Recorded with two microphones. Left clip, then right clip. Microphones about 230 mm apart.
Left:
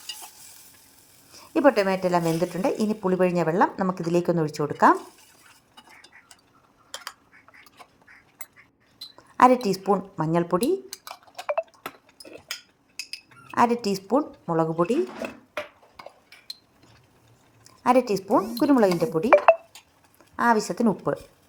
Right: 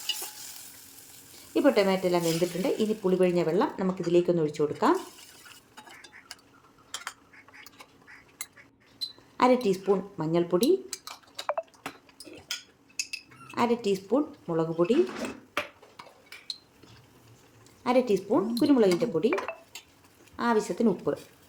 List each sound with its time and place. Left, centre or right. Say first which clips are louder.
1.5 s speech: left 3 dB; left
9.4 s speech: left 5 dB; left
11.3 s a sound: left 4 dB; centre
13.5 s speech: left 5 dB; left
17.8 s speech: left 4 dB; left